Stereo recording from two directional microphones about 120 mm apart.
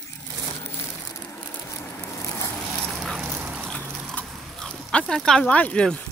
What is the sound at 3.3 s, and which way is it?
Dog, 15° right (ahead or behind).